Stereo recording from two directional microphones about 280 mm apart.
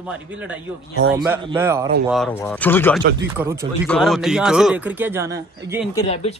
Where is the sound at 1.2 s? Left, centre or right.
Centre.